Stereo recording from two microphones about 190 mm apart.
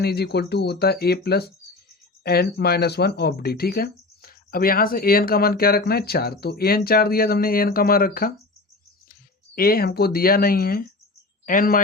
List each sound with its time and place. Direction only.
0.0 s speech: 55° left (ahead or behind)
9.6 s speech: 50° left (ahead or behind)